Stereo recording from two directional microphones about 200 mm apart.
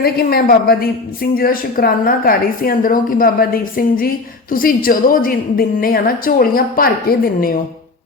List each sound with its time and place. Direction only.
0.0 s a woman's voice: 50° left (ahead or behind)